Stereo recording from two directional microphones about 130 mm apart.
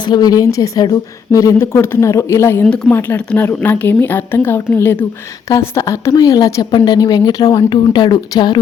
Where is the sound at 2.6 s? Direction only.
5° left (ahead or behind).